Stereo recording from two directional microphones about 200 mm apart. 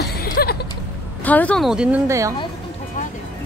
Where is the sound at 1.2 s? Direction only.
5° left (ahead or behind).